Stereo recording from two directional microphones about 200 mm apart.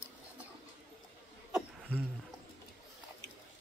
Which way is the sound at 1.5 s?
10° right (ahead or behind).